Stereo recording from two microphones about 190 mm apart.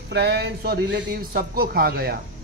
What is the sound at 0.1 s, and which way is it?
Speech, 60° right (ahead or behind).